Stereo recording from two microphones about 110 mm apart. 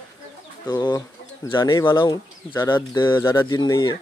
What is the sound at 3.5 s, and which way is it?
Speech, 40° left (ahead or behind).